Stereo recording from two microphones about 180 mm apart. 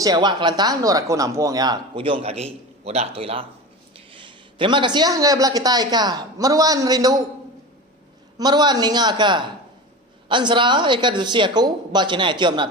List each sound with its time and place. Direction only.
0.0 s speech: 20° right (ahead or behind)
8.4 s speech: 25° right (ahead or behind)